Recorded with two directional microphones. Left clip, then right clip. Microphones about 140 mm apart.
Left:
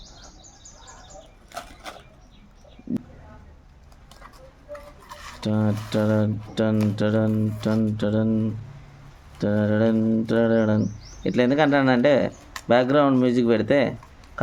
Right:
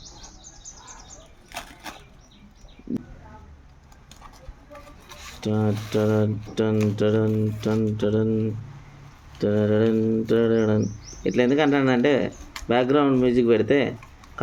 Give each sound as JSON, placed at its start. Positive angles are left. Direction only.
{"t": 5.4, "sound": "speech", "side_deg": 35}
{"t": 9.4, "sound": "speech", "side_deg": 25}
{"t": 14.4, "sound": "a sound", "side_deg": 40}